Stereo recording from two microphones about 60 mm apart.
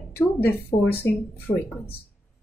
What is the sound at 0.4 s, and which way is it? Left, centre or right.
Speech, left.